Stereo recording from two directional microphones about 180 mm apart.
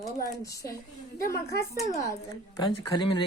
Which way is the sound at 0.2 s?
20° left (ahead or behind).